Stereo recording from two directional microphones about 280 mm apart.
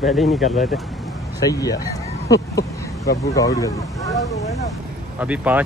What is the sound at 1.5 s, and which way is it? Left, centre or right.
Speech, centre.